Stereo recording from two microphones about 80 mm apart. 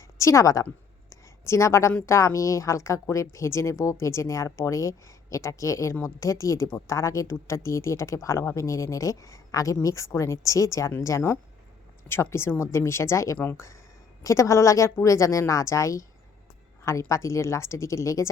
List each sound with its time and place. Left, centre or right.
0.2 s a woman's voice: left
1.1 s a sound: left
2.0 s speech: left
17.1 s speech: left